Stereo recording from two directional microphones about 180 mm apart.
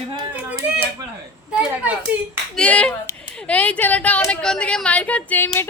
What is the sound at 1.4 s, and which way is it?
Speech, 5° right (ahead or behind).